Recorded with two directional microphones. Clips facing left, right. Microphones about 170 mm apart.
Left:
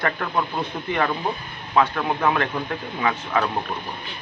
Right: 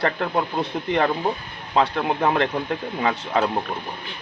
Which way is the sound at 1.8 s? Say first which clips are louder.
Even; 25° right (ahead or behind).